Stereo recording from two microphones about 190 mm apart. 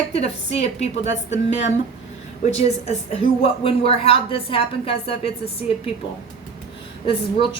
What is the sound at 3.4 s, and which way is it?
A woman's voice, 30° left (ahead or behind).